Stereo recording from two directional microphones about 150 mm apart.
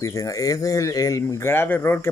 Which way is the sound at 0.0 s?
20° left (ahead or behind).